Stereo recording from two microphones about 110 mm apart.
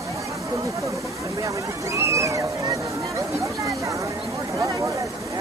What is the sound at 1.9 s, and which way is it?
Speech, 25° right (ahead or behind).